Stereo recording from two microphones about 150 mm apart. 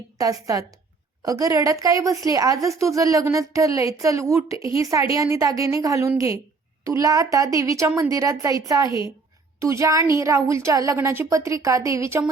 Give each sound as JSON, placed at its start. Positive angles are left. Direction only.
{"t": 0.2, "sound": "a woman's voice", "side_deg": -25}